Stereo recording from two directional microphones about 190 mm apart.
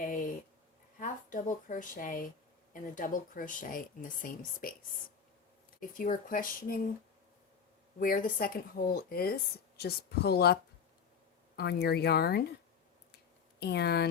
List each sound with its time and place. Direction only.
0.0 s a sound: 45° left (ahead or behind)
0.9 s speech: 40° left (ahead or behind)
6.0 s speech: 45° left (ahead or behind)
7.9 s speech: 50° left (ahead or behind)
13.6 s speech: 60° left (ahead or behind)